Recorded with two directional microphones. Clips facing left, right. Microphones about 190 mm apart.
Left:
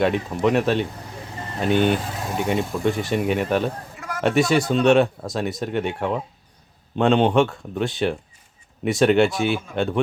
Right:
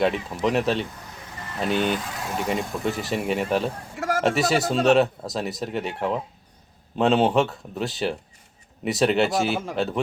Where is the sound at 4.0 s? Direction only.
90° right.